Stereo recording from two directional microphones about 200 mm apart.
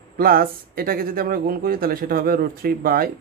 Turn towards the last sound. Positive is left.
turn(degrees=-45)  # may be behind; listen again after turning